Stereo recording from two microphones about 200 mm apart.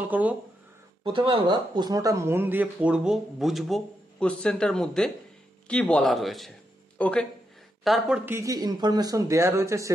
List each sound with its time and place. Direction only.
0.1 s speech: 10° right (ahead or behind)
1.0 s speech: 25° right (ahead or behind); by 8.2 s centre (ahead or behind)
8.3 s speech: 15° right (ahead or behind)